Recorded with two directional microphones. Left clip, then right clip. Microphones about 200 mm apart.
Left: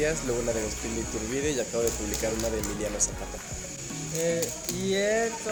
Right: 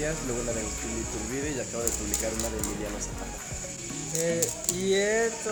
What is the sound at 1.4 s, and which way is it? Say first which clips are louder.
Speech: left 6 dB; 35° left (ahead or behind).